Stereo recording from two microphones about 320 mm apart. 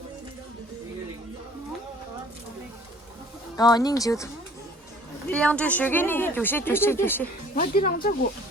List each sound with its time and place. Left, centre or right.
3.6 s speech: centre
5.3 s speech: centre
7.5 s speech: left